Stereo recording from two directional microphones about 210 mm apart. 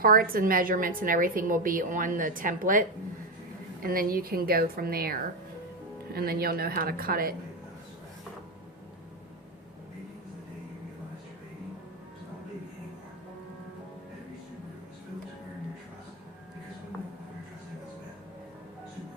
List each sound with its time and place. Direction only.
0.0 s a woman's voice: 45° right (ahead or behind)
3.8 s a woman's voice: 45° right (ahead or behind)